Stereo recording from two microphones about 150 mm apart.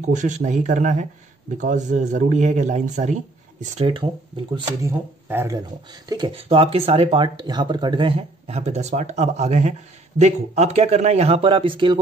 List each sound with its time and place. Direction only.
0.0 s speech: 55° right (ahead or behind)
3.8 s speech: 35° right (ahead or behind)
4.8 s speech: 15° right (ahead or behind)
6.0 s speech: 30° right (ahead or behind)